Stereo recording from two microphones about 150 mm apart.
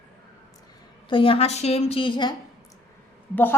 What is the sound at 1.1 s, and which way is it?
Speech, 35° left (ahead or behind).